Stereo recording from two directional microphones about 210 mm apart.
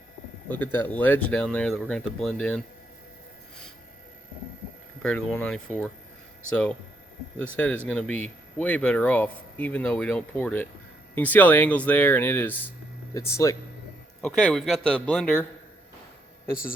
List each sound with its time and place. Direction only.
0.4 s speech: 10° left (ahead or behind)
5.0 s speech: 5° left (ahead or behind)
7.5 s speech: 5° left (ahead or behind)
14.2 s speech: 5° left (ahead or behind)